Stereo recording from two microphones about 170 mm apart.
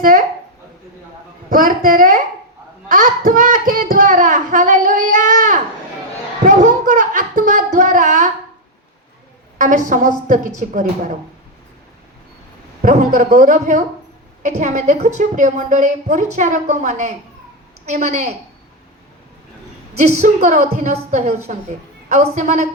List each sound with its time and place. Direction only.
0.0 s a woman's voice: 55° right (ahead or behind)
1.5 s a woman's voice: 55° right (ahead or behind)
6.4 s a sound: 50° right (ahead or behind)
9.6 s a woman's voice: 50° right (ahead or behind)
12.8 s a woman's voice: 50° right (ahead or behind)
20.0 s a woman's voice: 45° right (ahead or behind)